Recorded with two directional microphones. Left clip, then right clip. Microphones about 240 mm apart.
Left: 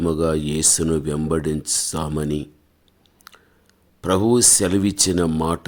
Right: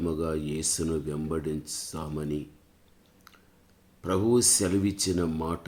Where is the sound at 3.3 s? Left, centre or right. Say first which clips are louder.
Left 10 dB; left.